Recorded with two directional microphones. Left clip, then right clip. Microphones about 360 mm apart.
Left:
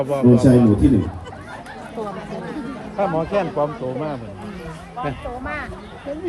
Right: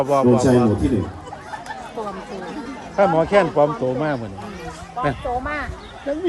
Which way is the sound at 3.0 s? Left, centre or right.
Right.